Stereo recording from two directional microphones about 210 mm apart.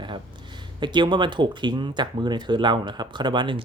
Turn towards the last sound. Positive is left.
turn(degrees=-20)  # may be behind; listen again after turning